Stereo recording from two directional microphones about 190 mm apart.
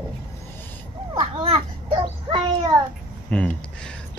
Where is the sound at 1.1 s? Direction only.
25° right (ahead or behind).